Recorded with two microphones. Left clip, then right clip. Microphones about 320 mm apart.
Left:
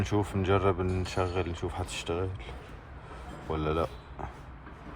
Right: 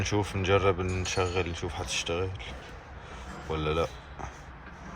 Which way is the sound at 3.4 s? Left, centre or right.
Centre.